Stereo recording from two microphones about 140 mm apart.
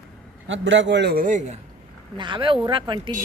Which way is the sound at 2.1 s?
35° right (ahead or behind).